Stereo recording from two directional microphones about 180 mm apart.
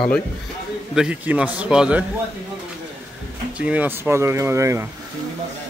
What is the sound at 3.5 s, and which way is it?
Speech, 5° right (ahead or behind).